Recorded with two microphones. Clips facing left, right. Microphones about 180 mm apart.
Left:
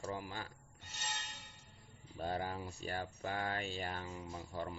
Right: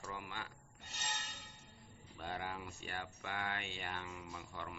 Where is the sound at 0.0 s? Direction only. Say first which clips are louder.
Left 4 dB; 35° left (ahead or behind).